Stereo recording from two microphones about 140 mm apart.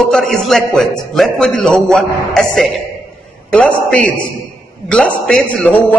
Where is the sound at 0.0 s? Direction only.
5° left (ahead or behind).